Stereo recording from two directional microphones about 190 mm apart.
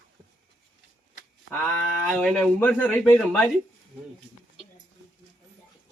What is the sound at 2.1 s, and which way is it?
A man's voice, 5° left (ahead or behind).